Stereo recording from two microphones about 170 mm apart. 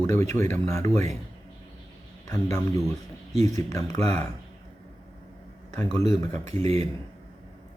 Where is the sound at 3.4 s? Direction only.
20° left (ahead or behind).